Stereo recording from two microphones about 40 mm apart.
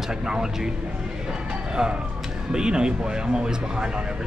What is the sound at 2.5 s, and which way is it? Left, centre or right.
Speech, centre.